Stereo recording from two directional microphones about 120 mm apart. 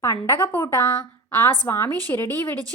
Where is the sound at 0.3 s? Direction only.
25° left (ahead or behind).